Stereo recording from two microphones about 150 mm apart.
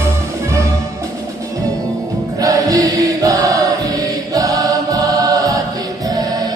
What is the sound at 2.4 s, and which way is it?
Choir, 25° right (ahead or behind).